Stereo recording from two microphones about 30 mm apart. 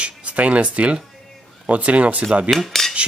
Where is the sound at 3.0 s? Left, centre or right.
Right.